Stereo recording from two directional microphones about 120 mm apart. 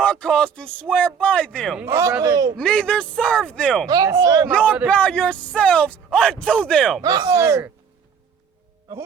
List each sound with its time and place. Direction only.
0.0 s speech: 10° left (ahead or behind)
1.8 s speech: 25° right (ahead or behind)
2.6 s speech: 10° left (ahead or behind)
3.8 s speech: 30° right (ahead or behind)
4.9 s speech: 10° left (ahead or behind)
7.0 s speech: 35° right (ahead or behind)